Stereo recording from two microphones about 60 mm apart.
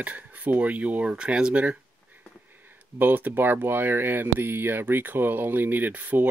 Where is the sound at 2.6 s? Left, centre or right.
Right.